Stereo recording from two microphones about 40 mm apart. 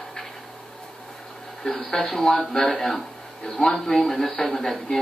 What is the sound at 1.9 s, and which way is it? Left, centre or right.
Speech, centre.